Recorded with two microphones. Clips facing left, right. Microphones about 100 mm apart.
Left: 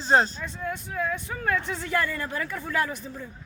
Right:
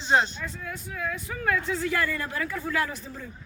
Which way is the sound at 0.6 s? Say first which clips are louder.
Left 6 dB; 25° left (ahead or behind).